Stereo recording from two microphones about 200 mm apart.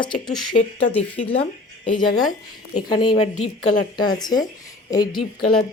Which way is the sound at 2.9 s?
20° left (ahead or behind).